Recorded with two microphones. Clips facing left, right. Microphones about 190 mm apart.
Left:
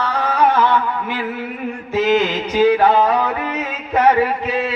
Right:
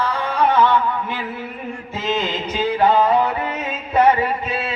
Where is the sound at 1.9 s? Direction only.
80° left.